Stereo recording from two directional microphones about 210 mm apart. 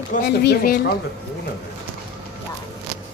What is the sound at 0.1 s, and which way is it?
Speech, 50° left (ahead or behind).